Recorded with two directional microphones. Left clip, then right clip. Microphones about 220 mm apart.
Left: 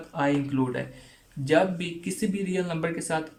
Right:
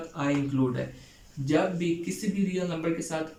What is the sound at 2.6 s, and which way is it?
Speech, 45° left (ahead or behind).